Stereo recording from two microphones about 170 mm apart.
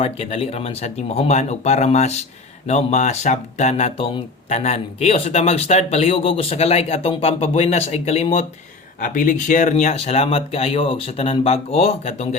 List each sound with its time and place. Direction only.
0.0 s speech: 35° left (ahead or behind)
9.0 s speech: 50° left (ahead or behind)